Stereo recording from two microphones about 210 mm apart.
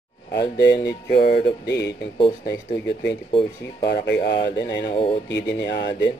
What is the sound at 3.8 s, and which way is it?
Music, 55° left (ahead or behind).